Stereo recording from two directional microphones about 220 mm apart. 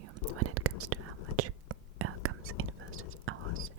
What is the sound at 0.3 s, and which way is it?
Whispering, 90° right.